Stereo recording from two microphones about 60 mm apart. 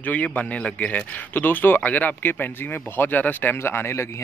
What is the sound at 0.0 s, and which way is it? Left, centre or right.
Speech, left.